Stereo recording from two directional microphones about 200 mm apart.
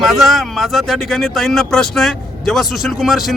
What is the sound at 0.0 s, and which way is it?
A man's voice, centre (ahead or behind).